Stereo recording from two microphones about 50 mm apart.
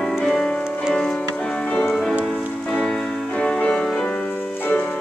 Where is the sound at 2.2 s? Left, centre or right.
Centre.